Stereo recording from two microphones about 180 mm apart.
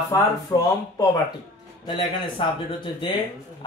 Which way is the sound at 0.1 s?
20° left (ahead or behind).